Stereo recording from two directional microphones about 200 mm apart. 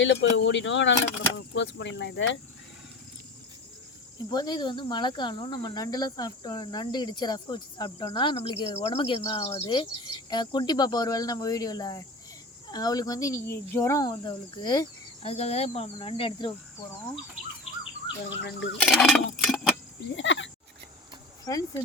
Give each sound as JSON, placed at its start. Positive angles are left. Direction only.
{"t": 0.0, "sound": "speech", "side_deg": 65}
{"t": 4.3, "sound": "speech", "side_deg": 20}
{"t": 15.3, "sound": "speech", "side_deg": 30}
{"t": 18.3, "sound": "speech", "side_deg": 65}
{"t": 18.8, "sound": "a sound", "side_deg": 0}
{"t": 20.1, "sound": "speech", "side_deg": 65}
{"t": 21.5, "sound": "speech", "side_deg": 20}